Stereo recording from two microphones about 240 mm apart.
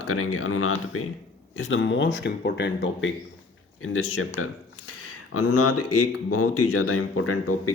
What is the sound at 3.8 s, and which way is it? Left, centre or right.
A man's voice, left.